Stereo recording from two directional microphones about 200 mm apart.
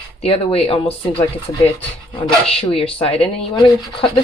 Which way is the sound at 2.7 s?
30° left (ahead or behind).